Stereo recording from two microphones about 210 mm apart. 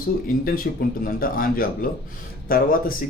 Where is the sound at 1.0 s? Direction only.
45° left (ahead or behind).